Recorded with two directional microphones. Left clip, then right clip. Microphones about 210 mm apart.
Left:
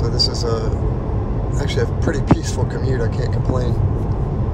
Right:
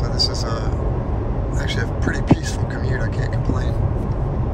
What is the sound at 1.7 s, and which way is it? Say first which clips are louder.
Speech: left 4 dB; 30° left (ahead or behind).